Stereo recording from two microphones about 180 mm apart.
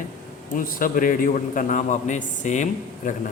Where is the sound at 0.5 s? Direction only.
50° left (ahead or behind).